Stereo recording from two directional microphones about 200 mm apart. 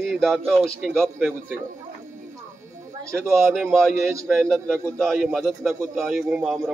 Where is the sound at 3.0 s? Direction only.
15° right (ahead or behind).